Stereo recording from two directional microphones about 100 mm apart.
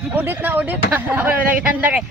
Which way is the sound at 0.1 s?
20° right (ahead or behind).